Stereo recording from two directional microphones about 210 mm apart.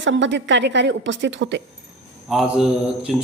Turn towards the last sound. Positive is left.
turn(degrees=-5)  # may be behind; listen again after turning